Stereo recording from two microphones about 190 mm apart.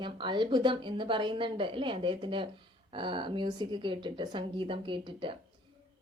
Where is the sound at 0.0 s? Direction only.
25° right (ahead or behind).